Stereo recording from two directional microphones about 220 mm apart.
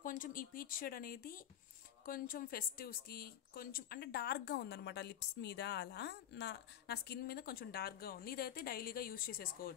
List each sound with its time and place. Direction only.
0.0 s speech: 40° left (ahead or behind)